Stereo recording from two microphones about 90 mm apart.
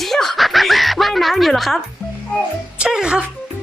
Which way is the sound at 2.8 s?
5° right (ahead or behind).